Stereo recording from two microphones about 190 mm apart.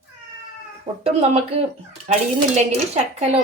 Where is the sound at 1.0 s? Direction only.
35° right (ahead or behind).